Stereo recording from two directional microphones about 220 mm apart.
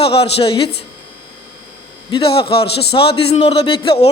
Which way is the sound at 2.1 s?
25° left (ahead or behind).